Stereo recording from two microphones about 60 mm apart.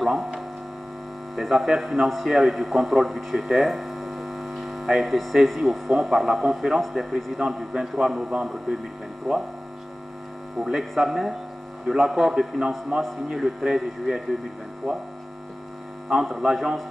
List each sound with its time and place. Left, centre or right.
1.3 s a man's voice: centre
10.6 s a man's voice: centre
16.1 s a man's voice: centre